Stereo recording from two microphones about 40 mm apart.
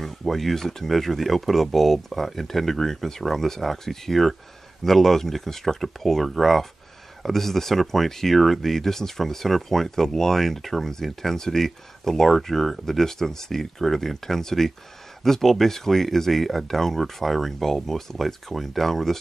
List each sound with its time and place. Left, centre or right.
0.0 s speech: centre